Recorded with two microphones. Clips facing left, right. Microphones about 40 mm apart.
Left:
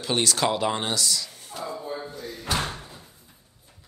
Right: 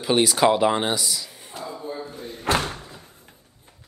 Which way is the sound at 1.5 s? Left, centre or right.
Right.